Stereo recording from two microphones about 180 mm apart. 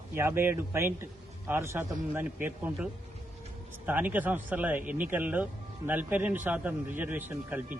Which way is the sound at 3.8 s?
10° right (ahead or behind).